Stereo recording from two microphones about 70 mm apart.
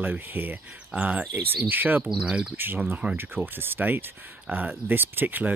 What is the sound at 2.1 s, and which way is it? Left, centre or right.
Speech, centre.